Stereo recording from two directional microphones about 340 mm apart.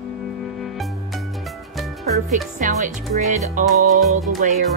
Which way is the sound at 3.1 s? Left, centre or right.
Centre.